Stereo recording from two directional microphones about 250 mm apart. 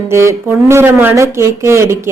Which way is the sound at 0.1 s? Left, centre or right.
Centre.